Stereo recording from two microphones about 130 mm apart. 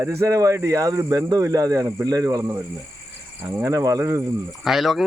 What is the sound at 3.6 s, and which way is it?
Speech, 25° right (ahead or behind).